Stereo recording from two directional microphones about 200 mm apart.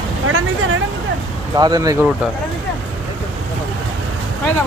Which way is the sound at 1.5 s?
20° right (ahead or behind).